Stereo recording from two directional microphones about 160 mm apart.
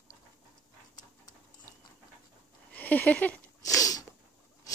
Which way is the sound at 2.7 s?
10° left (ahead or behind).